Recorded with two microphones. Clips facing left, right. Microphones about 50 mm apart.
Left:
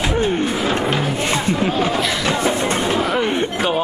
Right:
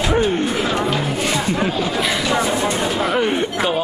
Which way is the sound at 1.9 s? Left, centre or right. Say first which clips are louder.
Even; centre.